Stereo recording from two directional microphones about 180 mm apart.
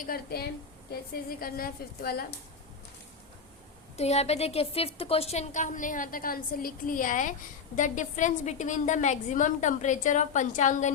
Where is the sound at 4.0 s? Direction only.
35° left (ahead or behind).